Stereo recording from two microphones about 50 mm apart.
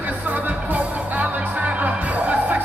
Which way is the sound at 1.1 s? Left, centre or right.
Right.